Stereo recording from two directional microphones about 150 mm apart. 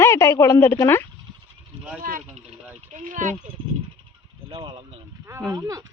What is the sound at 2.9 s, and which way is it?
Speech, 55° right (ahead or behind).